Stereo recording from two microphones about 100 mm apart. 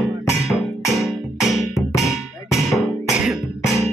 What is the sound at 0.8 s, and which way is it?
Music, centre (ahead or behind).